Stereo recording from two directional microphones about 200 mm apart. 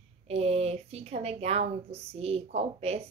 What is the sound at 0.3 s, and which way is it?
A woman's voice, 30° right (ahead or behind).